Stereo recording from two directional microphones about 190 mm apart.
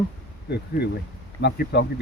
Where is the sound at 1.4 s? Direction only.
60° left (ahead or behind).